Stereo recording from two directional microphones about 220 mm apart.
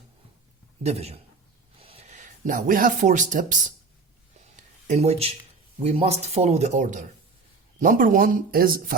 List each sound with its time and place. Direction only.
0.8 s speech: 30° right (ahead or behind)
4.4 s a sound: 35° right (ahead or behind)
5.8 s speech: 25° right (ahead or behind)